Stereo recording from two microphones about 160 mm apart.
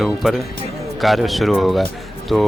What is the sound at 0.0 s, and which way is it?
Speech, centre (ahead or behind).